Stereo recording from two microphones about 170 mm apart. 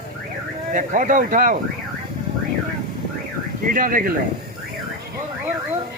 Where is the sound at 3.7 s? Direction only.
55° right (ahead or behind).